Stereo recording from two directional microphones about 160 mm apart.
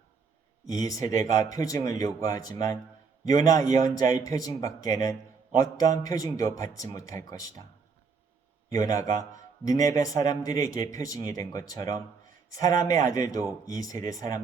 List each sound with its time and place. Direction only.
0.6 s speech: 20° left (ahead or behind)
8.7 s speech: 20° left (ahead or behind)